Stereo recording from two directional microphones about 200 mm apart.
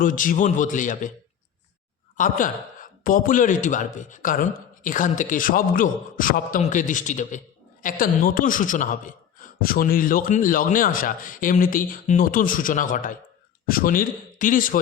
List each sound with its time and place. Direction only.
0.0 s a man's voice: 40° left (ahead or behind)
2.1 s a man's voice: 40° left (ahead or behind)